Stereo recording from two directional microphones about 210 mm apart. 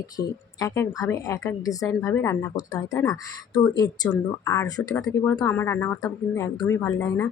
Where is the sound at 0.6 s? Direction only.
15° left (ahead or behind).